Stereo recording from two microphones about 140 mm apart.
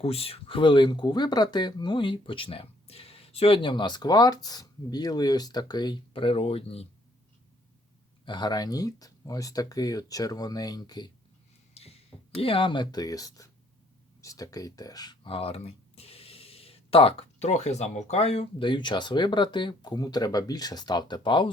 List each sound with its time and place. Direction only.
0.0 s speech: 45° left (ahead or behind)
8.2 s speech: 30° left (ahead or behind)
11.7 s speech: 45° left (ahead or behind)
18.6 s speech: 35° left (ahead or behind)